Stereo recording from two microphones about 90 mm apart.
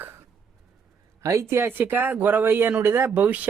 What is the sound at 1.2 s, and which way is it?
Speech, 35° right (ahead or behind).